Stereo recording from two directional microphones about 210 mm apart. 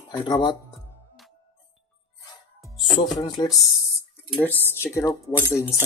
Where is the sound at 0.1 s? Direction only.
20° left (ahead or behind).